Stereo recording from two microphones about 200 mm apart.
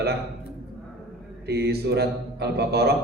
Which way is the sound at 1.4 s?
55° right (ahead or behind).